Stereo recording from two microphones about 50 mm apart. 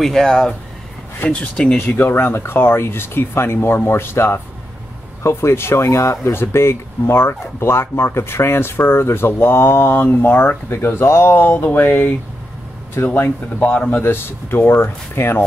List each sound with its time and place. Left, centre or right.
0.0 s speech: centre
1.3 s speech: left
1.8 s speech: left
13.6 s speech: left
14.0 s speech: left